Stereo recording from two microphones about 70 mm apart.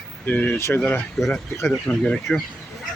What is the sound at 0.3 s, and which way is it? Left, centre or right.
Speech, left.